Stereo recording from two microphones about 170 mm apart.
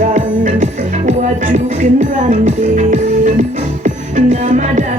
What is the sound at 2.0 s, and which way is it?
Music, 45° right (ahead or behind).